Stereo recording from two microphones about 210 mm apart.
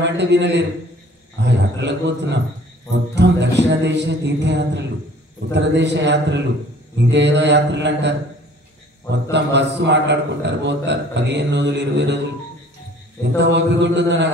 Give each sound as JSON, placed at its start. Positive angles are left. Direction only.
{"t": 0.0, "sound": "a man's voice", "side_deg": -55}
{"t": 13.2, "sound": "a man's voice", "side_deg": -55}